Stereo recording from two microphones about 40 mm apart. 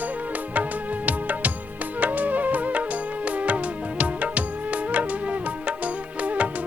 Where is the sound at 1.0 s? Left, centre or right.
Right.